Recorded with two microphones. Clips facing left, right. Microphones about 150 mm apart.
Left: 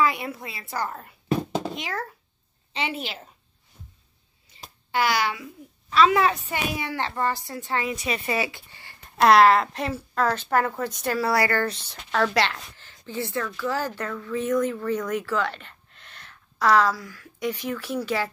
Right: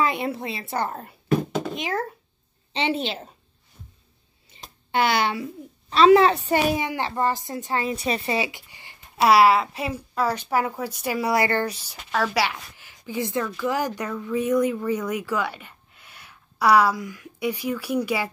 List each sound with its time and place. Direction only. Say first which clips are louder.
0.0 s a woman's voice: right 1 dB; 25° right (ahead or behind)
4.5 s a sound: even; 25° right (ahead or behind)
4.9 s a woman's voice: right 2 dB; 25° right (ahead or behind)
6.8 s a woman's voice: right 2 dB; 15° right (ahead or behind)
7.7 s a woman's voice: right 2 dB; 35° right (ahead or behind)
8.4 s a woman's voice: right 1 dB; 15° right (ahead or behind)
11.7 s a woman's voice: even; 10° right (ahead or behind)